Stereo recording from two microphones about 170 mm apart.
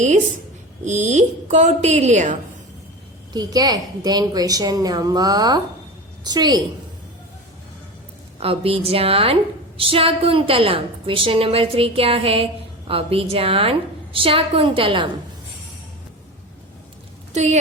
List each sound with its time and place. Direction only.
0.9 s a woman's voice: 45° right (ahead or behind)
3.3 s a woman's voice: 25° right (ahead or behind)
8.4 s a woman's voice: 35° right (ahead or behind)
17.3 s a woman's voice: 45° right (ahead or behind)